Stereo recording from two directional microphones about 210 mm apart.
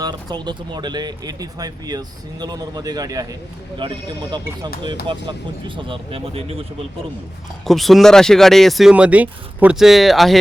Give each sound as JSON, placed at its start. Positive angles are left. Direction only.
{"t": 0.0, "sound": "speech", "side_deg": -20}
{"t": 7.6, "sound": "speech", "side_deg": 0}